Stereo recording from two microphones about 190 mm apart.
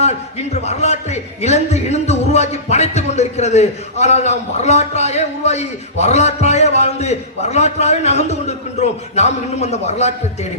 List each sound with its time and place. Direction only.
0.0 s a man's voice: 35° left (ahead or behind)